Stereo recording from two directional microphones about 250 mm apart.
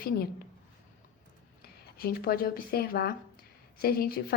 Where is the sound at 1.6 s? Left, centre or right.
Left.